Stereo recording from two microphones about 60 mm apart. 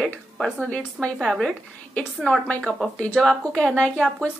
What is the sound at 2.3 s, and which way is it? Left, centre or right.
Speech, left.